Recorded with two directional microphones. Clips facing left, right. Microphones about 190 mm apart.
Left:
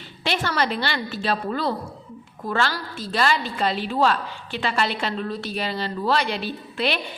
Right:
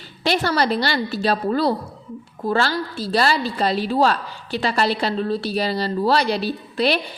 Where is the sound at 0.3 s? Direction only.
35° right (ahead or behind).